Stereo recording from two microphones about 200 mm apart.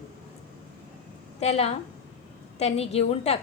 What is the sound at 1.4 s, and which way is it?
A woman's voice, 30° left (ahead or behind).